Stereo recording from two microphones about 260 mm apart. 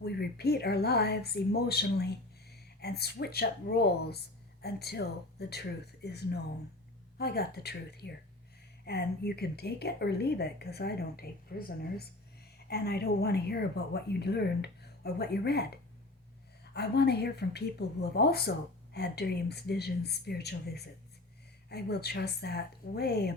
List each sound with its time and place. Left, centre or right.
0.0 s a woman's voice: left
16.7 s a woman's voice: left